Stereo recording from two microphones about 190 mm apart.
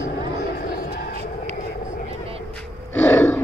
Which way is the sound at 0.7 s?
50° left (ahead or behind).